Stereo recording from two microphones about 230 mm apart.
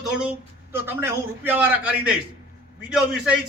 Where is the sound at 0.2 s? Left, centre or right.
Centre.